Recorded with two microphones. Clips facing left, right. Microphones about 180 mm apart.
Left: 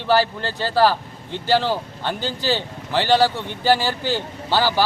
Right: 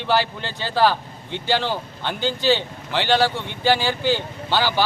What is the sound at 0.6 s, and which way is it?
A man's voice, 5° left (ahead or behind).